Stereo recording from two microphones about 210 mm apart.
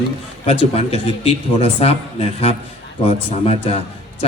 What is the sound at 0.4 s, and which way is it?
Speech, 25° left (ahead or behind).